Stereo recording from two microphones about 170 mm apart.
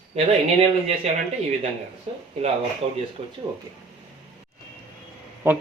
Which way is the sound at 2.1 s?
35° right (ahead or behind).